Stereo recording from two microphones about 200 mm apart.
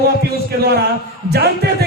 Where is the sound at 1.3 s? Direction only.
55° right (ahead or behind).